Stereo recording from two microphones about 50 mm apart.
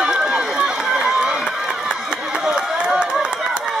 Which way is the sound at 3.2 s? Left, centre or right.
Centre.